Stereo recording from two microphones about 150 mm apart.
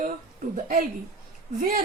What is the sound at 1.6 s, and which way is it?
Speech, 60° right (ahead or behind).